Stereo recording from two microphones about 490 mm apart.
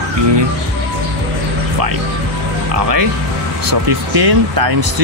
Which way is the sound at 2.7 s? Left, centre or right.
Right.